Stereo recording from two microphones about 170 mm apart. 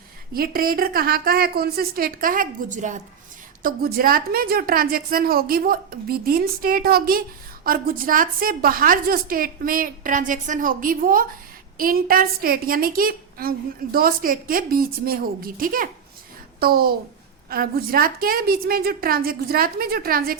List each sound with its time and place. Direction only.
0.3 s a woman's voice: 60° right (ahead or behind)
3.6 s a woman's voice: 60° right (ahead or behind)